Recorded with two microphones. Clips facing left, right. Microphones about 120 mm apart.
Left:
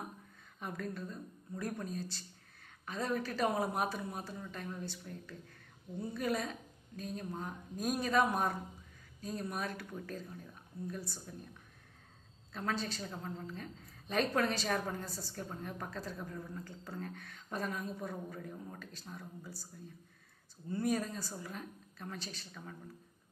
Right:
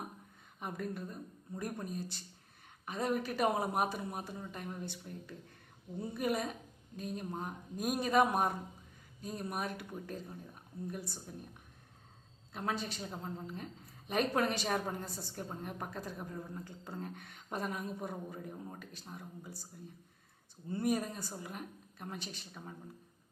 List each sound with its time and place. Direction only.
0.6 s a woman's voice: 15° right (ahead or behind)
12.5 s a woman's voice: 15° right (ahead or behind)
20.8 s a woman's voice: 15° right (ahead or behind)